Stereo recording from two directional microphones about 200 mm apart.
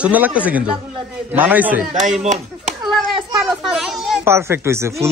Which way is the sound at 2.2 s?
35° right (ahead or behind).